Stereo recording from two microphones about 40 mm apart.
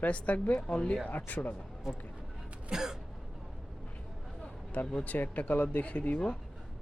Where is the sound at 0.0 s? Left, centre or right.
Left.